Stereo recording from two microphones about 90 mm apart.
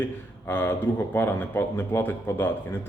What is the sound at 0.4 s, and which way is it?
Speech, 25° left (ahead or behind).